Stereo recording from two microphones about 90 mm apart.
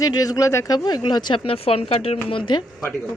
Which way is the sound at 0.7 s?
50° left (ahead or behind).